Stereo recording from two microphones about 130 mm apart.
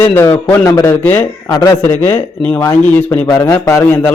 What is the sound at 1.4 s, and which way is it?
Speech, 30° left (ahead or behind).